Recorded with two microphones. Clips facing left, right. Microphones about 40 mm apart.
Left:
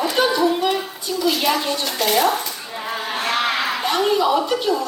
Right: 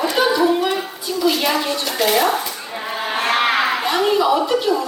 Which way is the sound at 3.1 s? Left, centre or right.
Right.